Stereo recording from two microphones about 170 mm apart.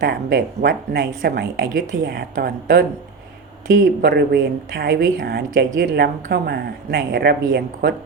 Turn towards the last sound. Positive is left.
turn(degrees=-65)  # may be behind; listen again after turning